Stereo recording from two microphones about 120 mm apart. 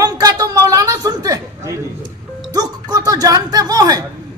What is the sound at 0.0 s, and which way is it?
Chatter, 30° right (ahead or behind).